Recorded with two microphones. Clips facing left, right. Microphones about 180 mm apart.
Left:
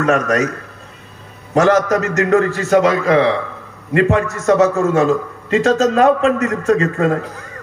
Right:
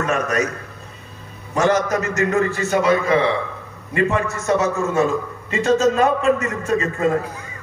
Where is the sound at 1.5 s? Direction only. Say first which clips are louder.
Left 5 dB; 90° left.